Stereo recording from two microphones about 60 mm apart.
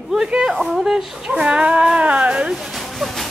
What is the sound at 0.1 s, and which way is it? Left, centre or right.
Speech, centre.